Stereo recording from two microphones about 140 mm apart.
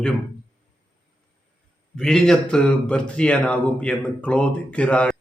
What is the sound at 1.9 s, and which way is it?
A man's voice, 5° left (ahead or behind).